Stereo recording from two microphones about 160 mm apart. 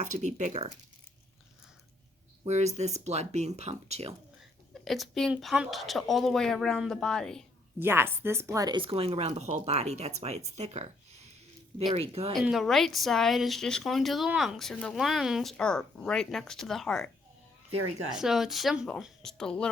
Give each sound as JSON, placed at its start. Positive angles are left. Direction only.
{"t": 0.0, "sound": "speech", "side_deg": -45}
{"t": 2.4, "sound": "speech", "side_deg": -45}
{"t": 4.7, "sound": "speech", "side_deg": 0}
{"t": 7.8, "sound": "speech", "side_deg": -15}
{"t": 11.9, "sound": "speech", "side_deg": -40}
{"t": 12.3, "sound": "speech", "side_deg": 0}
{"t": 18.2, "sound": "speech", "side_deg": 0}